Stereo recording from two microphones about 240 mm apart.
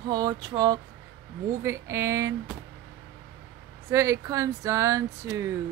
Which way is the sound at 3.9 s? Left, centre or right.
Centre.